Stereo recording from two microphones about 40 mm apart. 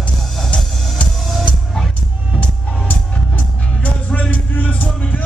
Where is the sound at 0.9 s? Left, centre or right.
Left.